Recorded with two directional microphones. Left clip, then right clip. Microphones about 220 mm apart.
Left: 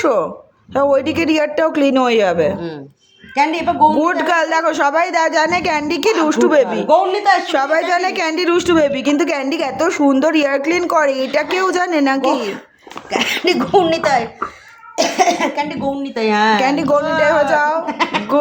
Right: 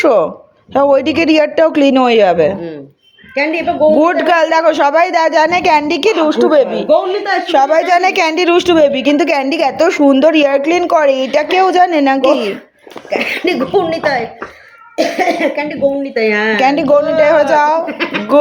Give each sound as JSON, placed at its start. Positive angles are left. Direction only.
{"t": 0.0, "sound": "a woman's voice", "side_deg": -15}
{"t": 3.9, "sound": "a woman's voice", "side_deg": -15}
{"t": 6.2, "sound": "speech", "side_deg": 0}
{"t": 7.4, "sound": "a woman's voice", "side_deg": -15}
{"t": 13.1, "sound": "speech", "side_deg": 55}
{"t": 16.6, "sound": "a woman's voice", "side_deg": -15}
{"t": 17.8, "sound": "speech", "side_deg": 30}